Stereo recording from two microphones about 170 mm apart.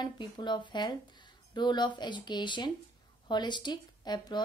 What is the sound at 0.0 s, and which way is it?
A woman's voice, 25° left (ahead or behind).